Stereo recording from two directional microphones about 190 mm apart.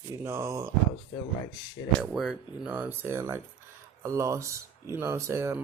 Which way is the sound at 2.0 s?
Centre (ahead or behind).